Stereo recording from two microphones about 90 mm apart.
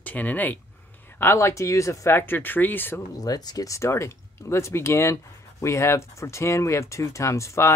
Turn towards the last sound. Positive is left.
turn(degrees=35)  # may be behind; listen again after turning